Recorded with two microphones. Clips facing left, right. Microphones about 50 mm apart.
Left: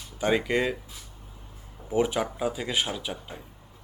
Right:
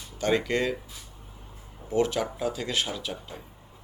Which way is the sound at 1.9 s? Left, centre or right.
Centre.